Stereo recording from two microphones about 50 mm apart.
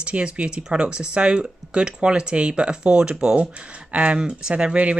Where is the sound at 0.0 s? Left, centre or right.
Right.